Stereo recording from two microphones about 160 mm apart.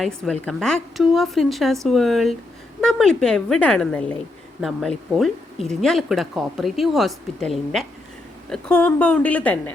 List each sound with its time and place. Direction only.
0.0 s a woman's voice: 5° left (ahead or behind)